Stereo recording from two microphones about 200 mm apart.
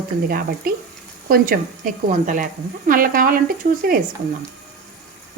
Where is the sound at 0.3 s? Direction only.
50° right (ahead or behind).